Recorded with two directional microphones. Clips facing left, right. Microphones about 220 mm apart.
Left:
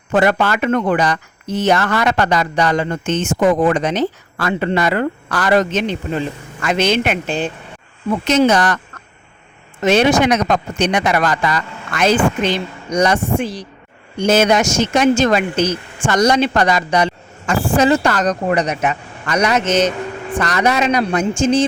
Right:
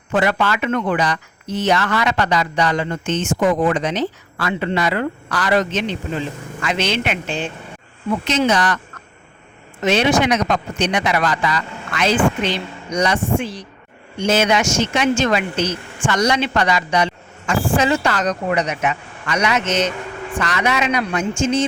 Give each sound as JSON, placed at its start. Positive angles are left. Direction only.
{"t": 0.1, "sound": "speech", "side_deg": 45}
{"t": 9.8, "sound": "speech", "side_deg": 45}